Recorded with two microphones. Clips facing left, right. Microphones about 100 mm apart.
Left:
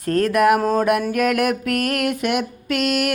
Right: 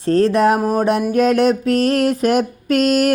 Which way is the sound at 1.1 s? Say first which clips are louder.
Right 5 dB; 25° right (ahead or behind).